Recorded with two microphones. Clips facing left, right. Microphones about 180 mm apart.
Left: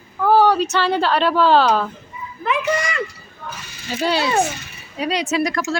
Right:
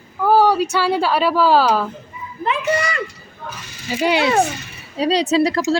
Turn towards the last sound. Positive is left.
turn(degrees=-30)  # may be behind; listen again after turning